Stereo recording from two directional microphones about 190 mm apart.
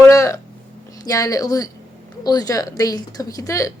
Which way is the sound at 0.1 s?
15° left (ahead or behind).